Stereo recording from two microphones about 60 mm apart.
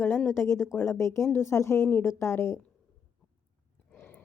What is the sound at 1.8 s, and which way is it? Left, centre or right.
Speech, left.